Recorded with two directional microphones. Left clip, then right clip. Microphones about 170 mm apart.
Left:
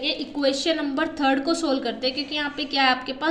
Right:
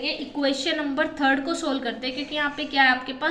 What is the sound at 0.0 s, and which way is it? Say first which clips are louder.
A woman's voice: left 2 dB; 35° left (ahead or behind).